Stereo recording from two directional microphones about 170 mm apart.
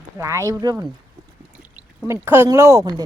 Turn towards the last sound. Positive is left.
turn(degrees=-20)  # may be behind; listen again after turning